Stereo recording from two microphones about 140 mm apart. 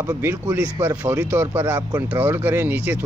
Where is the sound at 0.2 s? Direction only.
15° right (ahead or behind).